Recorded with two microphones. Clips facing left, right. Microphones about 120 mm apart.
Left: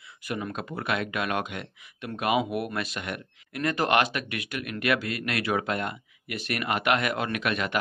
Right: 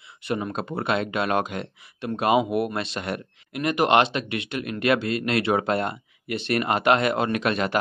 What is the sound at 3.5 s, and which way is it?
Speech, 20° right (ahead or behind).